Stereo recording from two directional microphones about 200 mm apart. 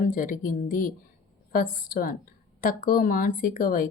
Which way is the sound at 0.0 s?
45° left (ahead or behind).